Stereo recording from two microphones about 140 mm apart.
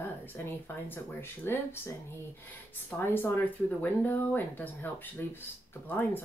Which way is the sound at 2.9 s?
15° left (ahead or behind).